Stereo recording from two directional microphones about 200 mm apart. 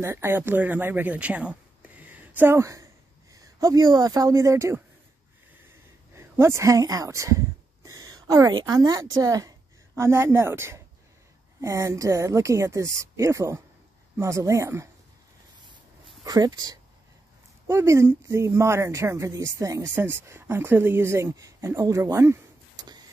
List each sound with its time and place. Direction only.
0.0 s speech: 10° right (ahead or behind)
6.1 s speech: 15° right (ahead or behind)
16.3 s speech: 20° right (ahead or behind)